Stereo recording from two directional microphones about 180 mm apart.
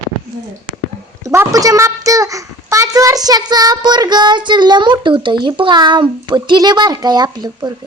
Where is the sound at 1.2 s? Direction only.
20° right (ahead or behind).